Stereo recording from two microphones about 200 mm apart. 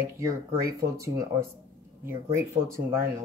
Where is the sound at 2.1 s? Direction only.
15° right (ahead or behind).